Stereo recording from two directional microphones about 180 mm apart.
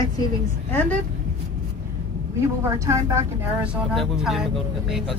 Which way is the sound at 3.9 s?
Centre (ahead or behind).